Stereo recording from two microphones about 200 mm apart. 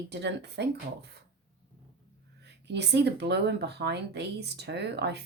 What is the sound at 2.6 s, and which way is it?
Speech, 60° right (ahead or behind).